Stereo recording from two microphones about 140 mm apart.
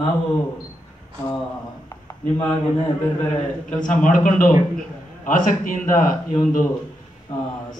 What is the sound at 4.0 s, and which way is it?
A man's voice, 65° left (ahead or behind).